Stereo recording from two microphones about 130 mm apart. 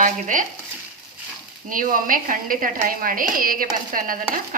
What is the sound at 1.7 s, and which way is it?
Stir, 90° right.